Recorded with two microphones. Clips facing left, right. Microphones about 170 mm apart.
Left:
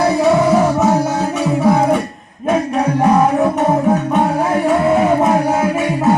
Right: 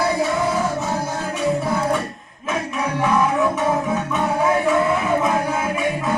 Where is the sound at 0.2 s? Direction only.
75° left (ahead or behind).